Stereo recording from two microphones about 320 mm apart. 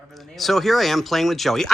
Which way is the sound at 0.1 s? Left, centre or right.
Centre.